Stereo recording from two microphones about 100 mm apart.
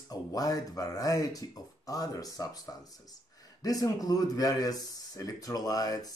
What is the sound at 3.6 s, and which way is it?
Speech, 40° left (ahead or behind).